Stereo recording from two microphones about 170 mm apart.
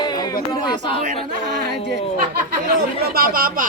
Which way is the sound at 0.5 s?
25° left (ahead or behind).